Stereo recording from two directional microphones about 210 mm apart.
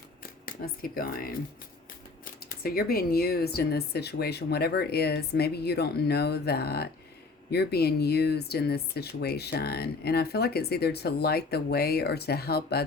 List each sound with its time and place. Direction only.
0.4 s speech: 45° left (ahead or behind)
2.5 s speech: 45° left (ahead or behind)